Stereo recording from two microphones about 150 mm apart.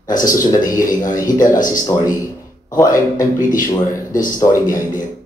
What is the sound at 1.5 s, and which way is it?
Speech, 60° left (ahead or behind).